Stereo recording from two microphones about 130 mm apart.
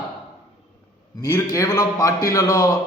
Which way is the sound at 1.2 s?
25° left (ahead or behind).